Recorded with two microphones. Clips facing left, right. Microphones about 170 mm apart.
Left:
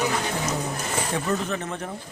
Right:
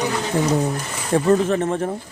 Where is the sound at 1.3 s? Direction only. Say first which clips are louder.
Right 13 dB; 45° right (ahead or behind).